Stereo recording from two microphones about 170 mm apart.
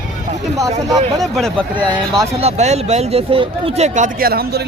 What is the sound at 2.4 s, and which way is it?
Speech, 40° right (ahead or behind).